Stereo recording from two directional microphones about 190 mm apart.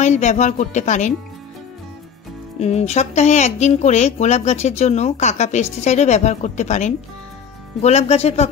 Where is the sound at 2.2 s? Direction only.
Centre (ahead or behind).